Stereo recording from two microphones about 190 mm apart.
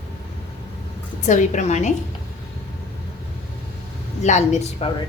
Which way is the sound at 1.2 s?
40° left (ahead or behind).